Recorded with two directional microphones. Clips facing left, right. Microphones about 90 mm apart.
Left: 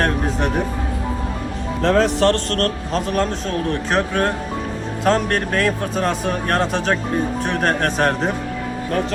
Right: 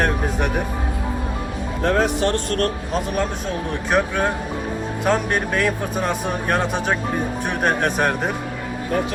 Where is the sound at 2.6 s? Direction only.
15° right (ahead or behind).